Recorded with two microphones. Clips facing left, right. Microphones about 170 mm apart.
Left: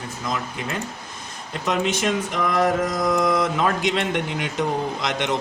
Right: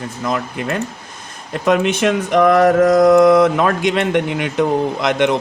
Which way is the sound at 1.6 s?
60° right (ahead or behind).